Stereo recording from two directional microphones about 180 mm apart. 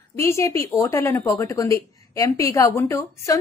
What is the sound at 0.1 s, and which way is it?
A woman's voice, 15° left (ahead or behind).